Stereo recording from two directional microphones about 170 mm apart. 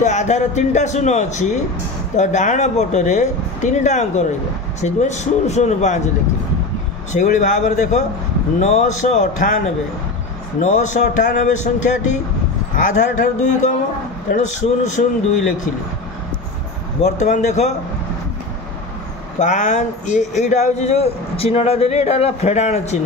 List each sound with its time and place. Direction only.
0.0 s speech: 45° left (ahead or behind)
7.1 s speech: 45° left (ahead or behind)
10.6 s speech: 45° left (ahead or behind)
15.0 s speech: 50° left (ahead or behind)
17.0 s speech: 40° left (ahead or behind)
19.3 s a man's voice: 45° left (ahead or behind)